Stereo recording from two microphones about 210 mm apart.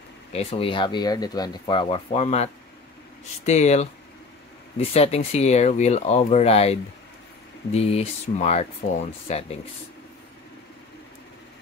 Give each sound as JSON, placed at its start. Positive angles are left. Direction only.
{"t": 0.3, "sound": "speech", "side_deg": 30}